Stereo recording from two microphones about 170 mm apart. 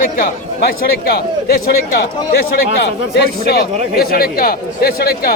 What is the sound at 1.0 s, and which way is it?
A man's voice, 70° left (ahead or behind).